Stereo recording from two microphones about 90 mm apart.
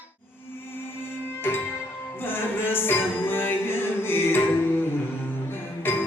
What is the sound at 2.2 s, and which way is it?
Music, 25° left (ahead or behind).